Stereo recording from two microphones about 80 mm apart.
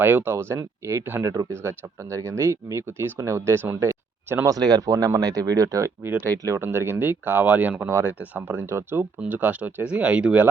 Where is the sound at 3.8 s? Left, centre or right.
Right.